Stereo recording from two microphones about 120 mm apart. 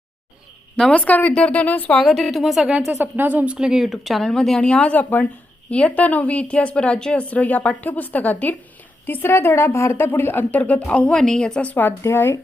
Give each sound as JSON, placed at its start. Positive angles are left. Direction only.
{"t": 0.8, "sound": "a woman's voice", "side_deg": 10}
{"t": 2.0, "sound": "a woman's voice", "side_deg": 0}
{"t": 2.9, "sound": "a woman's voice", "side_deg": -15}